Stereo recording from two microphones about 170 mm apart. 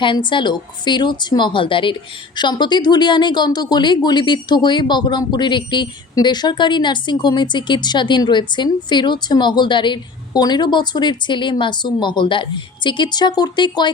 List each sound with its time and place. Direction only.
0.0 s a woman's voice: 30° left (ahead or behind)